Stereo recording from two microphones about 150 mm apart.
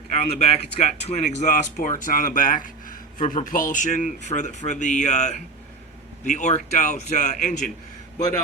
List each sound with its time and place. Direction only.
0.1 s speech: 50° left (ahead or behind)